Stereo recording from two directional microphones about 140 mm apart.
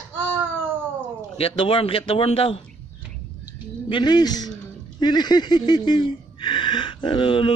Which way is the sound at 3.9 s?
35° left (ahead or behind).